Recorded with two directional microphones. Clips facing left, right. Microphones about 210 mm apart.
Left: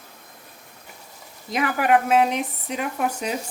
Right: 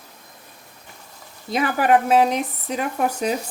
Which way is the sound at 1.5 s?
30° right (ahead or behind).